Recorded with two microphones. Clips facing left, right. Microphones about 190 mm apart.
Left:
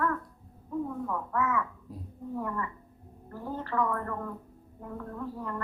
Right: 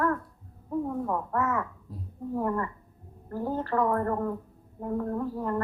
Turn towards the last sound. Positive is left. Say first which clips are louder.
# right 7 dB
turn(degrees=-40)  # may be behind; listen again after turning